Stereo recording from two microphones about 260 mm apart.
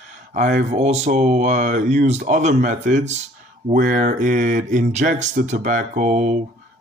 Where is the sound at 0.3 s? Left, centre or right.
Right.